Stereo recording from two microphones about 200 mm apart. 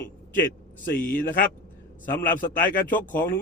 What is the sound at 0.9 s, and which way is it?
Speech, 45° left (ahead or behind).